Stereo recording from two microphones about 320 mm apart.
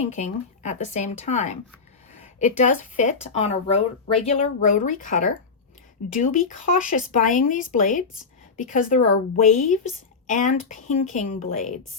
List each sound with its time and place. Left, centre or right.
0.0 s a woman's voice: left